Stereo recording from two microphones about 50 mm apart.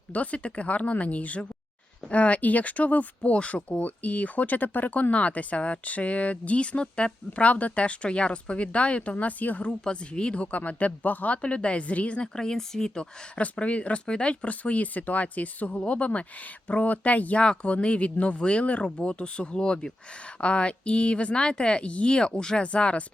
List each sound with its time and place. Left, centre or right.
0.1 s speech: left
9.6 s speech: left
12.4 s speech: centre
13.3 s speech: left
17.4 s speech: centre